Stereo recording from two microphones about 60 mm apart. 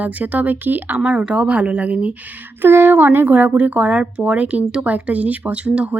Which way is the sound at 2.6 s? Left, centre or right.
Right.